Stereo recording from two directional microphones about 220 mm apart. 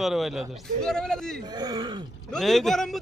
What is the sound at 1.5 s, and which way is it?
Speech, 20° right (ahead or behind).